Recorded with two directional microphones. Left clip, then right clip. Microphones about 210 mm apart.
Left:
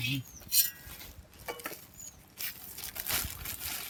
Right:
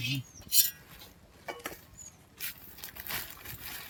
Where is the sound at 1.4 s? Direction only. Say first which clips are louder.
Even; 5° right (ahead or behind).